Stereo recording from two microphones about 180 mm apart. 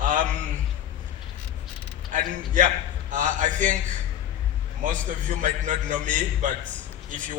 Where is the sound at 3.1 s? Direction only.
45° right (ahead or behind).